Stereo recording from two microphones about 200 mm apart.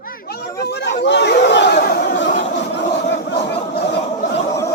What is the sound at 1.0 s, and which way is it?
Chatter, 60° left (ahead or behind).